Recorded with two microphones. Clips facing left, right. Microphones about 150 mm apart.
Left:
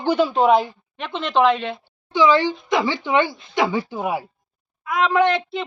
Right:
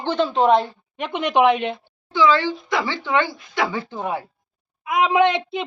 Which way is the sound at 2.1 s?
15° left (ahead or behind).